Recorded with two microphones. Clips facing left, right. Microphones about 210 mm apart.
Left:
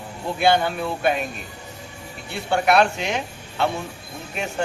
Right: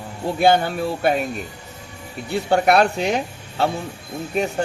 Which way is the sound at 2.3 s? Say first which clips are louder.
Right 3 dB; 35° right (ahead or behind).